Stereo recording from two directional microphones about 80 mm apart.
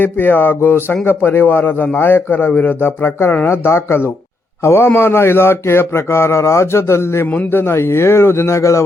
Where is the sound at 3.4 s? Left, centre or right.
Left.